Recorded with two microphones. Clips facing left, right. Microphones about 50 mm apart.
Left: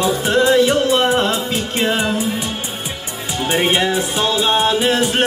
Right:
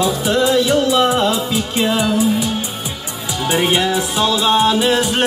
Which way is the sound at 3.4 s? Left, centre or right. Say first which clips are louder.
Even; left.